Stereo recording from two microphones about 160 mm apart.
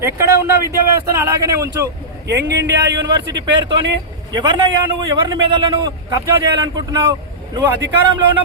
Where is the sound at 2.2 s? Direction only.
90° right.